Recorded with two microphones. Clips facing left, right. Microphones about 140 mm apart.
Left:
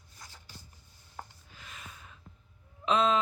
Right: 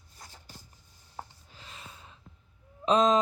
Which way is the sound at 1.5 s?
30° right (ahead or behind).